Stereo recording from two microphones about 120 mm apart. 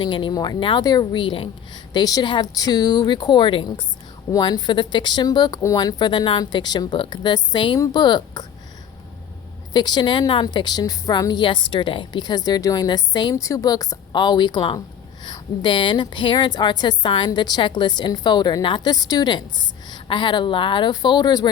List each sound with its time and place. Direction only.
0.0 s a woman's voice: 40° left (ahead or behind)
9.7 s a woman's voice: 35° left (ahead or behind)
13.3 s a woman's voice: 25° left (ahead or behind)